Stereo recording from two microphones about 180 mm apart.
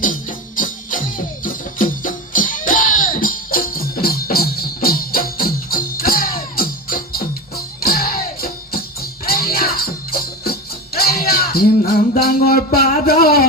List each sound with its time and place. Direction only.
0.0 s music: 50° left (ahead or behind)